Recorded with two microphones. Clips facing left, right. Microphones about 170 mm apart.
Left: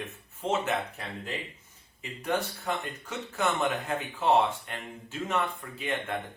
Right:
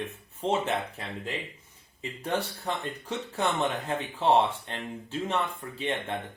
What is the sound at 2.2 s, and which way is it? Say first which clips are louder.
Speech: even; 30° right (ahead or behind).